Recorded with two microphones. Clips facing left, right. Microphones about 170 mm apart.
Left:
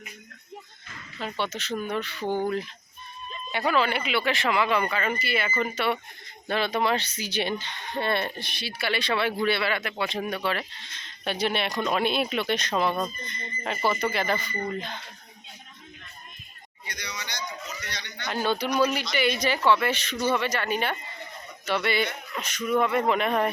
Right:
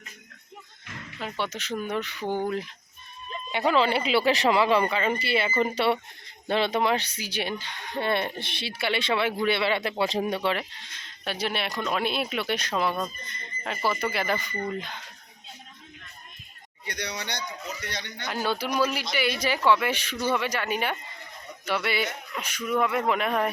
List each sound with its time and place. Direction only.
1.2 s speech: 10° right (ahead or behind)
3.5 s speech: 20° right (ahead or behind)
16.8 s speech: 65° right (ahead or behind)
17.9 s speech: 50° right (ahead or behind)
18.3 s speech: 5° right (ahead or behind)